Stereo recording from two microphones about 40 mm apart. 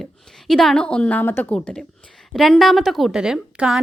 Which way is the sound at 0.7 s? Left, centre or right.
Left.